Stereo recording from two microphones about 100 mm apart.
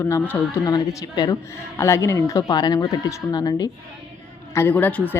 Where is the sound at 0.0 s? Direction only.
30° left (ahead or behind).